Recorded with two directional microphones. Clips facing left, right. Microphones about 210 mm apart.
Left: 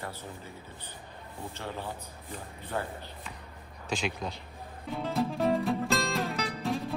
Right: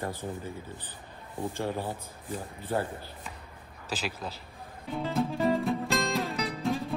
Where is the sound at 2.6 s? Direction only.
45° right (ahead or behind).